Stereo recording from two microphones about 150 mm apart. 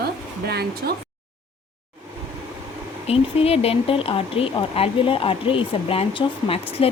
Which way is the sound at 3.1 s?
40° left (ahead or behind).